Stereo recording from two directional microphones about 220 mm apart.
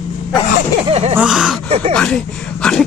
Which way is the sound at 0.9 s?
25° right (ahead or behind).